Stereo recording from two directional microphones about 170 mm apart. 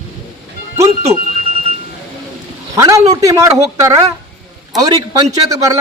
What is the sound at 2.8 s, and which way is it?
A man's voice, 20° right (ahead or behind).